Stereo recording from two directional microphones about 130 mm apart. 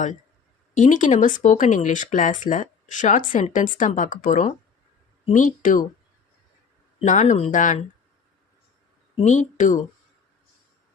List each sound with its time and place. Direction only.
0.7 s speech: 75° left (ahead or behind)
7.0 s speech: 70° left (ahead or behind)
9.2 s speech: 65° left (ahead or behind)